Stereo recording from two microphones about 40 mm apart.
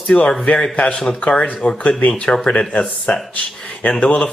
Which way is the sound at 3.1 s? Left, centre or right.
Left.